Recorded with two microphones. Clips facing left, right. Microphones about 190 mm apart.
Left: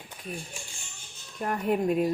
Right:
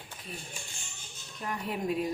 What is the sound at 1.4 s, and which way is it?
Speech, 50° left (ahead or behind).